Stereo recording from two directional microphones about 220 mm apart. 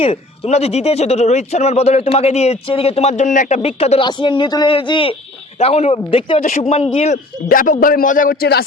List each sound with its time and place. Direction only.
0.0 s a man's voice: 30° left (ahead or behind); by 8.6 s 45° left (ahead or behind)